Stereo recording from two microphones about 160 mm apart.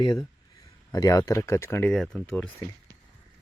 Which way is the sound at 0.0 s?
25° left (ahead or behind).